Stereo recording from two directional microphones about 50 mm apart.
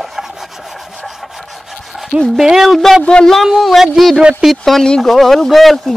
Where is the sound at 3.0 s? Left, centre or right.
Centre.